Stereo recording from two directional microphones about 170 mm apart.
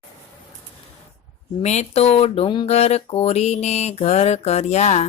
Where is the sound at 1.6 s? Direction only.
40° left (ahead or behind).